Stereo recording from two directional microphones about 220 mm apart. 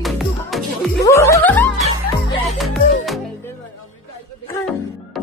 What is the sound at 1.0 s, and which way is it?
Music, 15° left (ahead or behind).